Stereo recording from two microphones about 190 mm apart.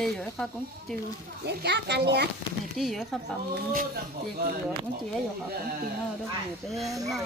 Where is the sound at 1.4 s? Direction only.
60° right (ahead or behind).